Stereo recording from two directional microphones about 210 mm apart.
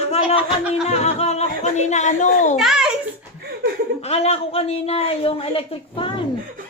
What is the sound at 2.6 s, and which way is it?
Speech, centre (ahead or behind).